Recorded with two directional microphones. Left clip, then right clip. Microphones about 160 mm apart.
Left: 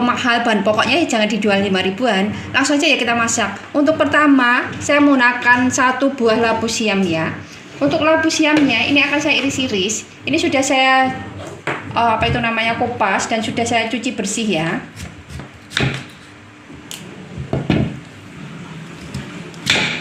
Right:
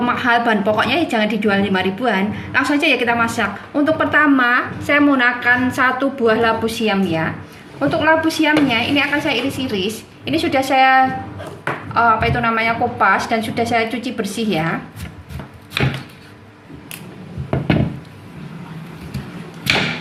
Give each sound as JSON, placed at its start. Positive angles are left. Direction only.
{"t": 0.0, "sound": "a woman's voice", "side_deg": 30}